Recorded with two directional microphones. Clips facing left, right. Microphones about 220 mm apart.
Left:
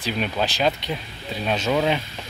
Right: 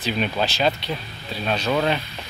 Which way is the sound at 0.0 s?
10° left (ahead or behind).